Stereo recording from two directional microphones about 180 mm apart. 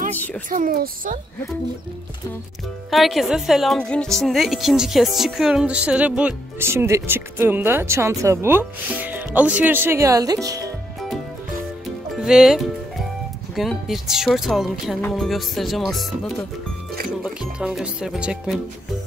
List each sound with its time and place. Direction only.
0.1 s a sound: 10° left (ahead or behind)
0.5 s a child's voice: 50° right (ahead or behind)
2.9 s a woman's voice: centre (ahead or behind); by 10.7 s 20° right (ahead or behind)
12.2 s speech: 5° right (ahead or behind)